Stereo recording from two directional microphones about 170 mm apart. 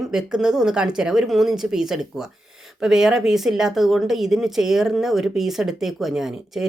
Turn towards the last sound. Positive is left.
turn(degrees=0)  # may be behind; listen again after turning